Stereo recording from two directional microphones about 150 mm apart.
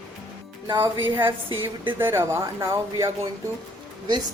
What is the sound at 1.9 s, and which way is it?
Speech, 15° right (ahead or behind).